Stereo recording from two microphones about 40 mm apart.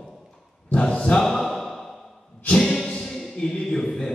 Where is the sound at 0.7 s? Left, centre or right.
Left.